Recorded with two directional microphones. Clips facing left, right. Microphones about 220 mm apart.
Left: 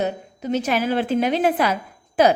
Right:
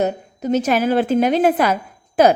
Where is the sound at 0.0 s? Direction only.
45° right (ahead or behind).